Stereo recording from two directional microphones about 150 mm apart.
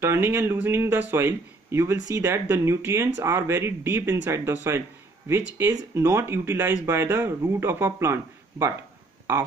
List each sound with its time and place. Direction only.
0.0 s speech: 15° right (ahead or behind)
5.6 s speech: 15° right (ahead or behind)